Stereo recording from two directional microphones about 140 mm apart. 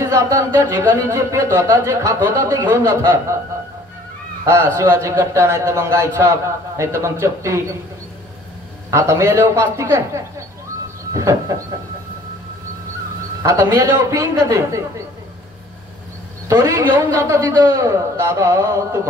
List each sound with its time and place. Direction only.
0.0 s speech: 20° right (ahead or behind)
4.5 s speech: 20° right (ahead or behind)
8.9 s speech: 20° right (ahead or behind)
13.4 s speech: 20° right (ahead or behind)
16.4 s speech: 25° right (ahead or behind)